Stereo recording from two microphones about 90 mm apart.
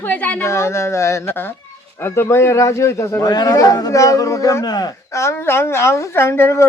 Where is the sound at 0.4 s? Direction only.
30° left (ahead or behind).